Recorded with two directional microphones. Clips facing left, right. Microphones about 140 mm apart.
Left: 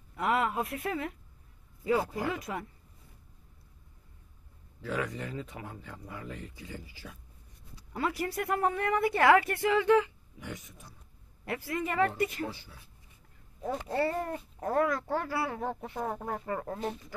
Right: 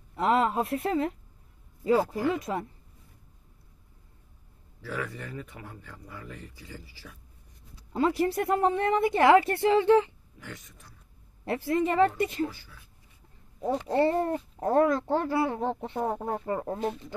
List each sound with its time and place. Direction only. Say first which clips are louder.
0.1 s speech: right 5 dB; 30° right (ahead or behind)
2.2 s speech: right 6 dB; 25° right (ahead or behind)
4.8 s speech: left 1 dB; 15° left (ahead or behind)
7.9 s speech: right 7 dB; 25° right (ahead or behind)
10.4 s speech: left 2 dB; 15° left (ahead or behind)
11.4 s speech: right 7 dB; 30° right (ahead or behind)
13.6 s speech: right 6 dB; 25° right (ahead or behind)